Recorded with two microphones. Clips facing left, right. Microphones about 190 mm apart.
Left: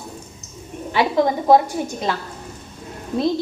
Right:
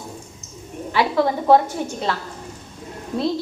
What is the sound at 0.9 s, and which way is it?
A woman's voice, 20° left (ahead or behind).